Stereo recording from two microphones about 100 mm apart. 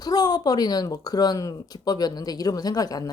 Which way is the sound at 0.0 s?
40° left (ahead or behind).